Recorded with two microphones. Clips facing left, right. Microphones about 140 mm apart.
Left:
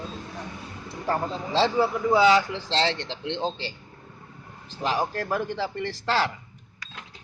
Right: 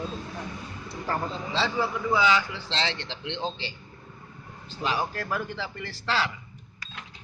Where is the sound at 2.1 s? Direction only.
45° left (ahead or behind).